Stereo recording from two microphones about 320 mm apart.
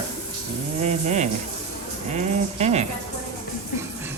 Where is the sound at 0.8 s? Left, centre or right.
Right.